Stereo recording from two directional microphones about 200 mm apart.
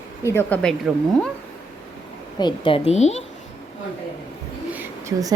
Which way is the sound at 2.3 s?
25° left (ahead or behind).